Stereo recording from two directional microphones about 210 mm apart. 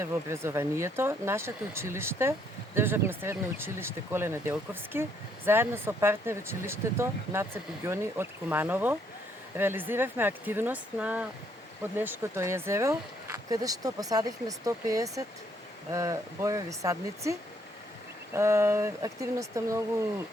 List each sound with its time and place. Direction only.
0.0 s speech: 10° right (ahead or behind)
18.3 s speech: 10° right (ahead or behind)